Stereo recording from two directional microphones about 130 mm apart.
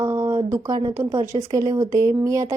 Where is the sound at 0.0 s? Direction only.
20° right (ahead or behind).